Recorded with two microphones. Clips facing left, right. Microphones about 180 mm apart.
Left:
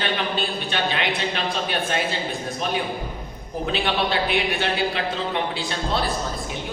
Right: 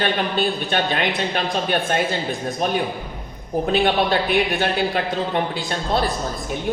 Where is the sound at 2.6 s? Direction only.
50° right (ahead or behind).